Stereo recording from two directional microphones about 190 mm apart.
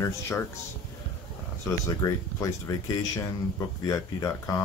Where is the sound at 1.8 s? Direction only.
20° left (ahead or behind).